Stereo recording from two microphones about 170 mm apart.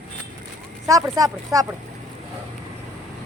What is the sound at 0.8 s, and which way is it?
Speech, 20° right (ahead or behind).